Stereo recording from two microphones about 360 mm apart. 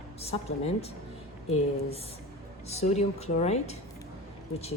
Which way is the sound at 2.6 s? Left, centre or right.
Centre.